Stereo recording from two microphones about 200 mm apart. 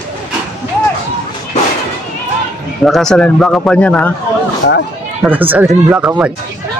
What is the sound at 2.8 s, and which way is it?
Speech, centre (ahead or behind).